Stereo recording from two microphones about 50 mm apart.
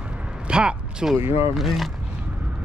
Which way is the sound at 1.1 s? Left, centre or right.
Right.